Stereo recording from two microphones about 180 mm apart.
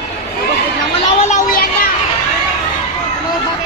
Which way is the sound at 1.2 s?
50° left (ahead or behind).